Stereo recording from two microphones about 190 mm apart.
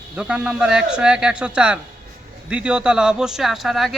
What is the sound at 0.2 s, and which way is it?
Speech, 5° right (ahead or behind).